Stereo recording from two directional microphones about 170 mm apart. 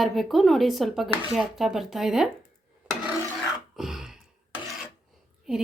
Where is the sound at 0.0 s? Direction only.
Centre (ahead or behind).